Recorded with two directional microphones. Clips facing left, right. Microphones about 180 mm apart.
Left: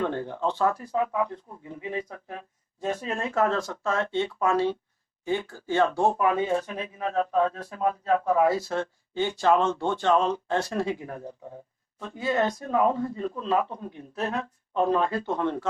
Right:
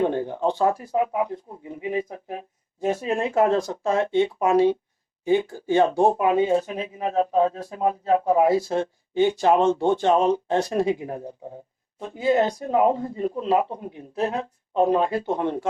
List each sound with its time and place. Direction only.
0.0 s speech: 20° right (ahead or behind)